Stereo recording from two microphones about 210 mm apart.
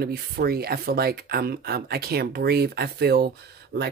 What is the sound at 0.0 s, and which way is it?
Speech, 45° right (ahead or behind).